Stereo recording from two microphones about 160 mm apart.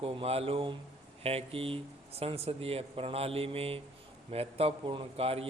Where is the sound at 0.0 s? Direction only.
35° right (ahead or behind).